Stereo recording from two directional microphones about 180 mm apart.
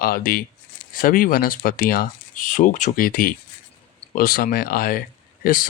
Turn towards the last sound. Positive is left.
turn(degrees=50)  # may be behind; listen again after turning